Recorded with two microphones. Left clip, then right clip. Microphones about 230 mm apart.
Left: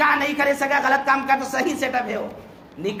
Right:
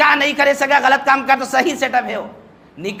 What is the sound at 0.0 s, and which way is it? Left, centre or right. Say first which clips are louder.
A woman's voice: right 6 dB; right.